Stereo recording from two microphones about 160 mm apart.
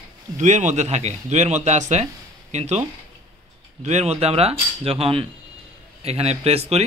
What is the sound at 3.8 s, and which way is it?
Speech, 45° right (ahead or behind).